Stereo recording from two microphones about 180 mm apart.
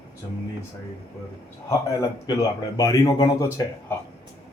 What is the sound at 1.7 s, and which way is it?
Speech, 20° left (ahead or behind).